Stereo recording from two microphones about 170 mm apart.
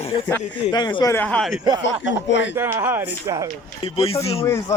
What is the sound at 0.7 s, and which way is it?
Speech, 25° left (ahead or behind).